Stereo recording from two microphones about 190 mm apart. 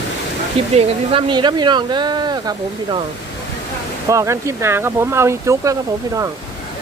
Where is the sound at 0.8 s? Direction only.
25° right (ahead or behind).